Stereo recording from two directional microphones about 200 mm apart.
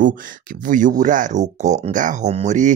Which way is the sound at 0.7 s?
40° right (ahead or behind).